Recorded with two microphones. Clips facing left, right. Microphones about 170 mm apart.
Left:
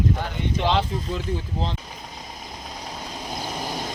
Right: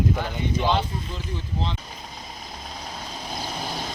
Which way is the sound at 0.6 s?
90° left.